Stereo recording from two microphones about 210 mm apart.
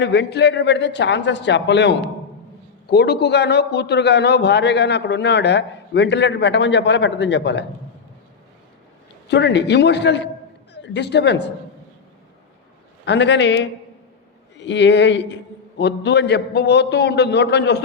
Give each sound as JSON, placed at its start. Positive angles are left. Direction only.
{"t": 0.0, "sound": "a man's voice", "side_deg": 55}
{"t": 9.3, "sound": "a man's voice", "side_deg": 55}
{"t": 13.1, "sound": "a man's voice", "side_deg": 55}